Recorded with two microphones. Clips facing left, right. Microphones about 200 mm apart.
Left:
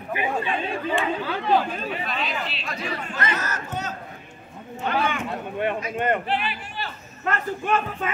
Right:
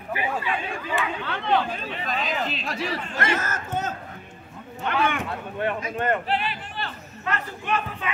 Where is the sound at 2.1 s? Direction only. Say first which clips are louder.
Right 2 dB; 45° right (ahead or behind).